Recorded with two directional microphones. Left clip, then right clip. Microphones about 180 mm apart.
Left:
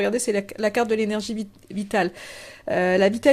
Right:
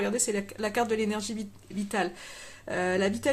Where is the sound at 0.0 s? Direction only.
35° left (ahead or behind).